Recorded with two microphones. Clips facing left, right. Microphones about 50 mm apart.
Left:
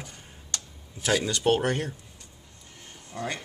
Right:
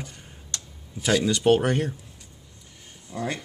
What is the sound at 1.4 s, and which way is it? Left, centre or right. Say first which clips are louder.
Speech: right 4 dB; centre.